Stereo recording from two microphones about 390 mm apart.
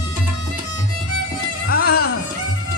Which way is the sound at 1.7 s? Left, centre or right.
Left.